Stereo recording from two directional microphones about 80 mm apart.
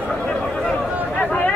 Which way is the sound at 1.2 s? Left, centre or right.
Centre.